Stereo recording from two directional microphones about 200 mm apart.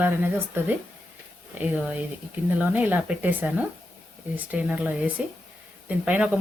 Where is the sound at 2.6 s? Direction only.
10° right (ahead or behind).